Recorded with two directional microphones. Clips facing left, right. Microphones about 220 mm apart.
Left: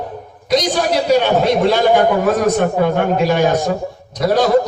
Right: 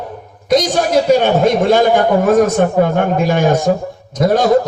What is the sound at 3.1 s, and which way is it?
A man's voice, 50° right (ahead or behind).